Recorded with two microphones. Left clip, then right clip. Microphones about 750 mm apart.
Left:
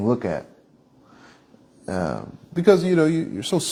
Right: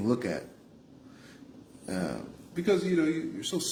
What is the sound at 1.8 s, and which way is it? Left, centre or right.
Speech, left.